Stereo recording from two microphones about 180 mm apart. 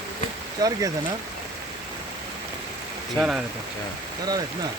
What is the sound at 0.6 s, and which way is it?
Speech, 20° right (ahead or behind).